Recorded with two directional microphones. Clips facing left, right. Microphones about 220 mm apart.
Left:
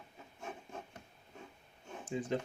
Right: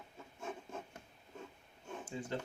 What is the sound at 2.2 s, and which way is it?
Speech, 15° left (ahead or behind).